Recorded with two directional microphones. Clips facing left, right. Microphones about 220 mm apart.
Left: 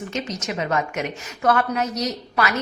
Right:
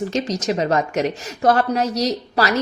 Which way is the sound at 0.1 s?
35° right (ahead or behind).